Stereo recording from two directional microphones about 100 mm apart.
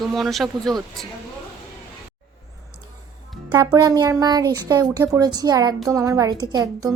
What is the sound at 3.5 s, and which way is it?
A woman's voice, 40° right (ahead or behind).